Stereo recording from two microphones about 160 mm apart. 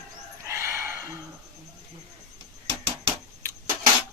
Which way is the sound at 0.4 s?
15° right (ahead or behind).